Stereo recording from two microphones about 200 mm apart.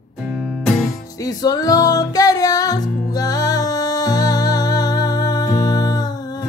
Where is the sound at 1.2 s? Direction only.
20° left (ahead or behind).